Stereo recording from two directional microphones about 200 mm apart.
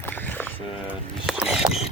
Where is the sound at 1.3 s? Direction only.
Centre (ahead or behind).